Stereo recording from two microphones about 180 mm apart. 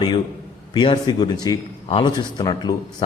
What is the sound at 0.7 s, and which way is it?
Speech, 25° left (ahead or behind).